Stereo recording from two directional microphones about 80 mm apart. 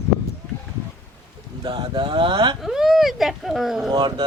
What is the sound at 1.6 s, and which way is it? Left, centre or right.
Speech, right.